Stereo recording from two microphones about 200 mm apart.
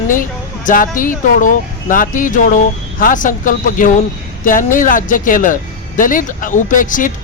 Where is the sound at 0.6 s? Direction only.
40° left (ahead or behind).